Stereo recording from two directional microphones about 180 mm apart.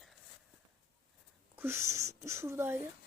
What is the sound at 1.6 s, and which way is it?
Speech, 15° right (ahead or behind).